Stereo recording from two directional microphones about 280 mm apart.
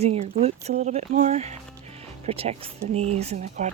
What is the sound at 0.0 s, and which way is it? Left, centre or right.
Speech, right.